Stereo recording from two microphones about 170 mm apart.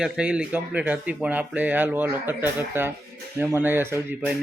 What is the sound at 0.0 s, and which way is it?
Speech, 5° right (ahead or behind).